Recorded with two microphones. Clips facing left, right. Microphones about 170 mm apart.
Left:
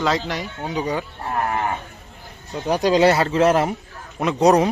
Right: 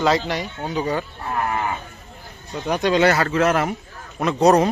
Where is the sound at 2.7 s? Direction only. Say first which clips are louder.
Left 2 dB; 35° left (ahead or behind).